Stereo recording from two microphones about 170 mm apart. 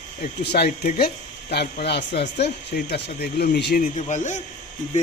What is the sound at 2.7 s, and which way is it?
Speech, 65° left (ahead or behind).